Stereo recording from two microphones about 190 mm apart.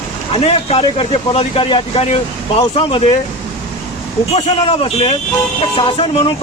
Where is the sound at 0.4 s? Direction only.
30° left (ahead or behind).